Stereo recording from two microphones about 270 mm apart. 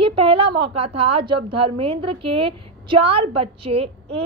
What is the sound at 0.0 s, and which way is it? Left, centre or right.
A woman's voice, centre.